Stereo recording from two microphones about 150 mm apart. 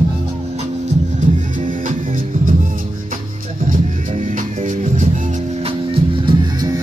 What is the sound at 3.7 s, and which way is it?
Music, 55° right (ahead or behind).